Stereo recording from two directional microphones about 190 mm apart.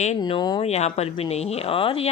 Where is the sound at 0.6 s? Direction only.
35° left (ahead or behind).